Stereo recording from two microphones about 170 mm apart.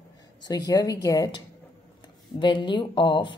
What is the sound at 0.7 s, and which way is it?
A woman's voice, 20° left (ahead or behind).